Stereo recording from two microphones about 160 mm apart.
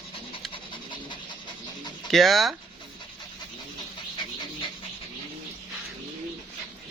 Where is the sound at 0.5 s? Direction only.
30° left (ahead or behind).